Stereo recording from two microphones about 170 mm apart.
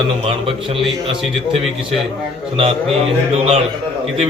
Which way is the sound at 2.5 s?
35° right (ahead or behind).